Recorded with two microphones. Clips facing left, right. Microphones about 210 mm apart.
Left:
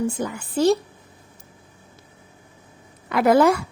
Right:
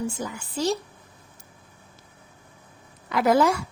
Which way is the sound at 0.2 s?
55° left (ahead or behind).